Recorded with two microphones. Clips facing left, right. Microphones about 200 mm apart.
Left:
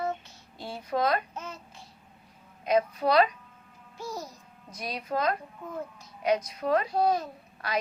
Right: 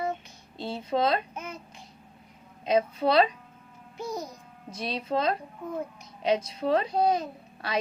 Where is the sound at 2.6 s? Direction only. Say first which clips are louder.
Right 1 dB; 25° right (ahead or behind).